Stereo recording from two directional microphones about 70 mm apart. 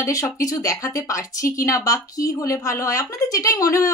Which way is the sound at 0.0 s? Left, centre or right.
Left.